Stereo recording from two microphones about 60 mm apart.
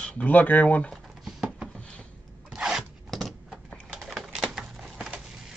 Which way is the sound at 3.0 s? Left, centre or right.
Centre.